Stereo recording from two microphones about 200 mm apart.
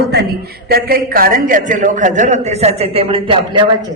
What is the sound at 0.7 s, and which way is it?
A man's voice, 45° right (ahead or behind).